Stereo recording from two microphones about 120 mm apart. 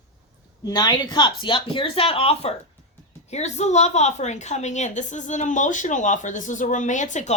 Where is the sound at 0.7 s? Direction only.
35° left (ahead or behind); by 2.5 s 55° left (ahead or behind).